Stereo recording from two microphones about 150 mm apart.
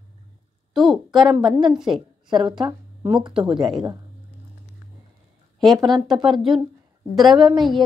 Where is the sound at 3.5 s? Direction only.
30° right (ahead or behind).